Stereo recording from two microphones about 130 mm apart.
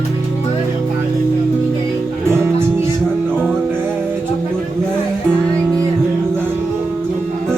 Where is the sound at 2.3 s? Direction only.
20° right (ahead or behind).